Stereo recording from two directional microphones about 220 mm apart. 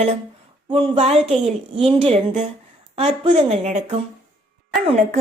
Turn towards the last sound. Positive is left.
turn(degrees=-35)  # may be behind; listen again after turning